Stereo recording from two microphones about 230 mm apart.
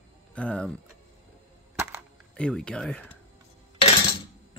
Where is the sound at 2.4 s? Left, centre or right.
Centre.